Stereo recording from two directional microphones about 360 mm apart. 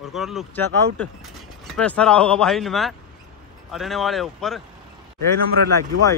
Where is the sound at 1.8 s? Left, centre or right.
Centre.